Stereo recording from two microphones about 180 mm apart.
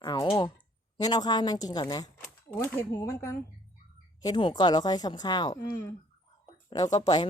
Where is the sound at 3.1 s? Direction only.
15° left (ahead or behind).